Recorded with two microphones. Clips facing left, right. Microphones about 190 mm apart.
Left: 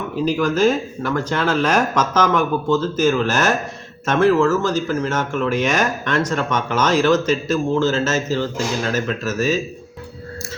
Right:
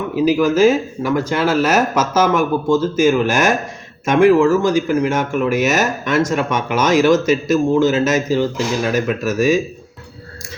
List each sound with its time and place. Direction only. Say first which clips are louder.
0.2 s speech: right 4 dB; 10° right (ahead or behind)